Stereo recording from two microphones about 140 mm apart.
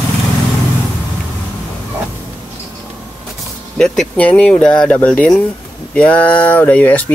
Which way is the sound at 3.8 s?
5° left (ahead or behind).